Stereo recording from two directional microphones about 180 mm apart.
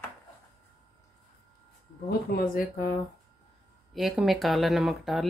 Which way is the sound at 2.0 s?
55° left (ahead or behind).